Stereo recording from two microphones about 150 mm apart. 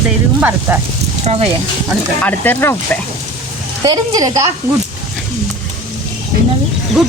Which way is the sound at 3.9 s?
25° right (ahead or behind).